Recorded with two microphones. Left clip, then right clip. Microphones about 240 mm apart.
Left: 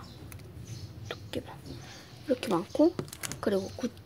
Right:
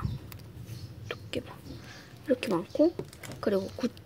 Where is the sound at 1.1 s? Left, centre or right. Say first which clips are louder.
Right 2 dB; centre.